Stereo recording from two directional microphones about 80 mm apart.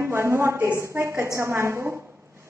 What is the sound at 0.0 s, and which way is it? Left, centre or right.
A woman's voice, right.